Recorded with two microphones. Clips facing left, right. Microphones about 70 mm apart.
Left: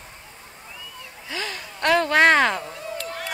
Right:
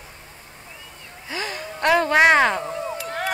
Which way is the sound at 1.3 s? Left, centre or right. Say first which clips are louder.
Right 2 dB; centre.